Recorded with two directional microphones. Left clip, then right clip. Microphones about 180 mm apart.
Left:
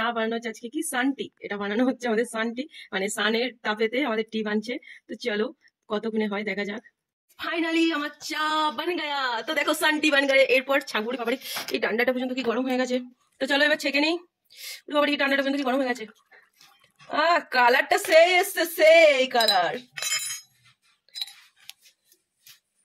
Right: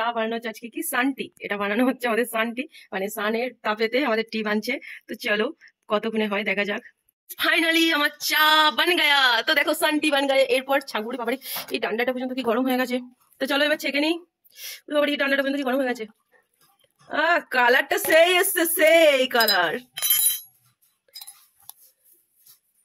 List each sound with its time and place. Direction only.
0.1 s a woman's voice: 5° right (ahead or behind)
12.5 s a woman's voice: 30° right (ahead or behind)
13.6 s speech: 10° right (ahead or behind)
17.1 s speech: 10° right (ahead or behind)
21.1 s cutlery: 25° right (ahead or behind)